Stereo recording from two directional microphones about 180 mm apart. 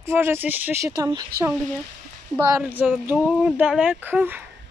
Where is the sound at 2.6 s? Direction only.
10° right (ahead or behind).